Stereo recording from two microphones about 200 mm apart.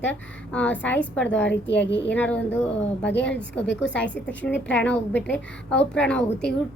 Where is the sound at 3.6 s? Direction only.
65° left (ahead or behind).